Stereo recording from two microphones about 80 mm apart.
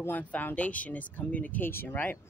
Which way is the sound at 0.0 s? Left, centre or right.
Left.